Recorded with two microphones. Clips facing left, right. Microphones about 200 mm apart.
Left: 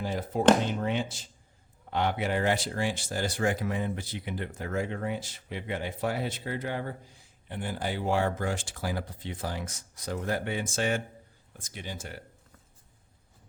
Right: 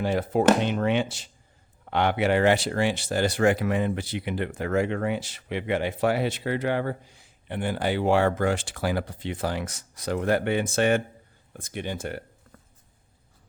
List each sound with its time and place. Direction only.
0.0 s speech: 75° right (ahead or behind)